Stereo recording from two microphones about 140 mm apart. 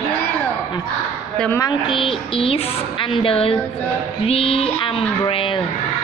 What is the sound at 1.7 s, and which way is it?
A woman's voice, 35° left (ahead or behind).